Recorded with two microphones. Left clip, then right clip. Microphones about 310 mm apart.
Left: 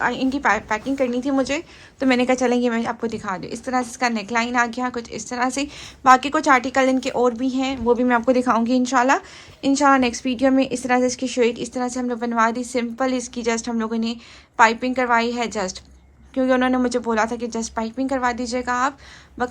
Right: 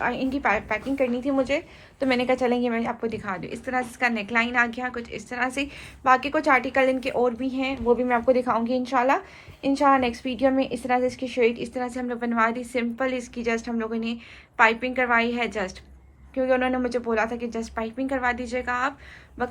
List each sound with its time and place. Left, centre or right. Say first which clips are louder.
0.0 s a woman's voice: left 4 dB; left